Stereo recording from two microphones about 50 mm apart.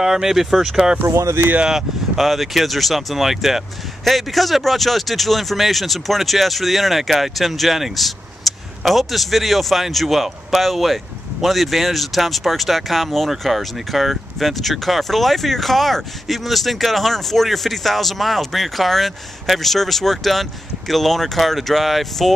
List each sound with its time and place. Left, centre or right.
0.0 s speech: centre
1.0 s speech: right
1.6 s speech: centre